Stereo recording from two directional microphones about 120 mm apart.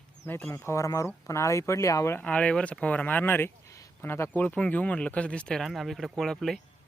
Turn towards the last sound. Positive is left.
turn(degrees=5)  # may be behind; listen again after turning